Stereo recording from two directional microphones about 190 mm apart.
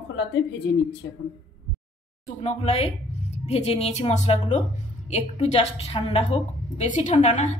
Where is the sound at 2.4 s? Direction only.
35° left (ahead or behind).